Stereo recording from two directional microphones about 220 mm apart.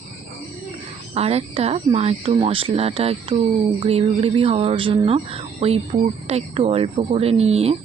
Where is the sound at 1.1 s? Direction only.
30° right (ahead or behind).